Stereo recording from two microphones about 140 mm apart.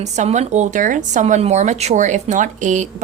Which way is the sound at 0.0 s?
55° right (ahead or behind).